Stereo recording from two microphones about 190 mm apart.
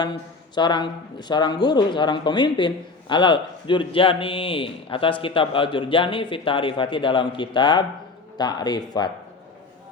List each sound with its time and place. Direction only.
0.0 s speech: 25° left (ahead or behind)